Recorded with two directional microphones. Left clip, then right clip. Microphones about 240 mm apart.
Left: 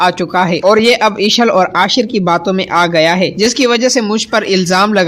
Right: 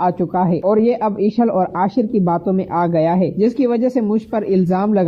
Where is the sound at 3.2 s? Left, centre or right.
Left.